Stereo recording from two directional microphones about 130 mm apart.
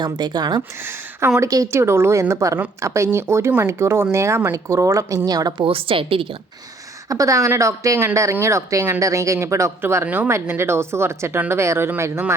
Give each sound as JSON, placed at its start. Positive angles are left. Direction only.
{"t": 0.0, "sound": "speech", "side_deg": -35}
{"t": 0.8, "sound": "speech", "side_deg": -15}
{"t": 5.6, "sound": "a woman's voice", "side_deg": -45}
{"t": 7.1, "sound": "speech", "side_deg": -25}